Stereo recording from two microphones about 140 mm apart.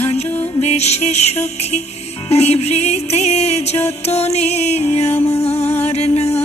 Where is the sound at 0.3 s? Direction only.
10° left (ahead or behind).